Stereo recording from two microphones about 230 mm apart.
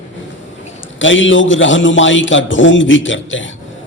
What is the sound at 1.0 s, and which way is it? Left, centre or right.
A man's voice, left.